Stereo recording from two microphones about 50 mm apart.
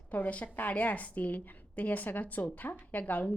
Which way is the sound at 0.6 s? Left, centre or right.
Left.